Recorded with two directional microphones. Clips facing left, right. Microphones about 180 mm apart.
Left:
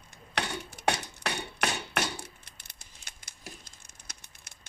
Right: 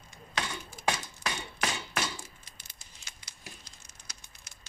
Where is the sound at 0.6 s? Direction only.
70° left (ahead or behind).